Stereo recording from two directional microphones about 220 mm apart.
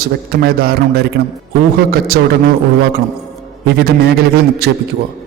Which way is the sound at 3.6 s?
45° right (ahead or behind).